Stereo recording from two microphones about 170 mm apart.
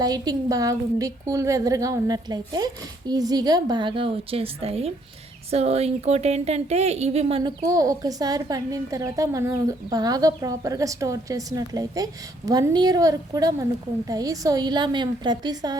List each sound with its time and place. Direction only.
0.0 s a woman's voice: 20° right (ahead or behind)
7.6 s a woman's voice: 20° right (ahead or behind)